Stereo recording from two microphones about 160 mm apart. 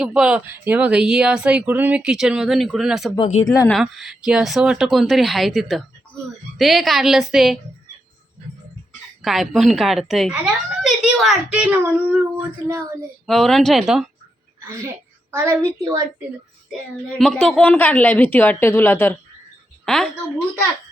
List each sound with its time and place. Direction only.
0.0 s speech: 5° right (ahead or behind)
3.2 s speech: 45° left (ahead or behind)
3.4 s speech: 20° left (ahead or behind)
3.7 s speech: centre (ahead or behind)
9.2 s a woman's voice: centre (ahead or behind); by 13.1 s 20° right (ahead or behind)
13.2 s speech: centre (ahead or behind)
15.3 s a woman's voice: 20° right (ahead or behind)
16.9 s a woman's voice: 5° left (ahead or behind)
19.8 s a woman's voice: 5° left (ahead or behind)